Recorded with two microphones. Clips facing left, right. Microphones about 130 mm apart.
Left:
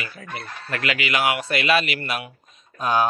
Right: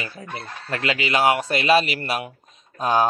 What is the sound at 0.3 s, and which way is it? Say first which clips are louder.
Speech: even; 25° right (ahead or behind).